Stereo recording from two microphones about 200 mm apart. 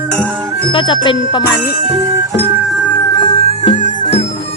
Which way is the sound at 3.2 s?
30° left (ahead or behind).